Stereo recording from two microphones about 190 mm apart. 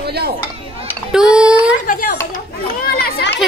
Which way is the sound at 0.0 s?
55° right (ahead or behind).